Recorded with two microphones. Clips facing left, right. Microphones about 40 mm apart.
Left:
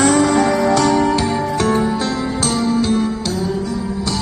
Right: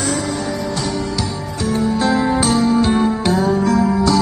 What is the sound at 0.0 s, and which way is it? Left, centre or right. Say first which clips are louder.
Music: left 8 dB; left.